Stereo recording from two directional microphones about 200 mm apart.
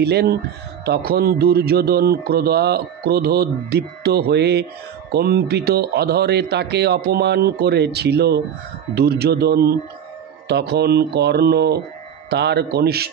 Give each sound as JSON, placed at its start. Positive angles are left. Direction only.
{"t": 0.0, "sound": "speech", "side_deg": -55}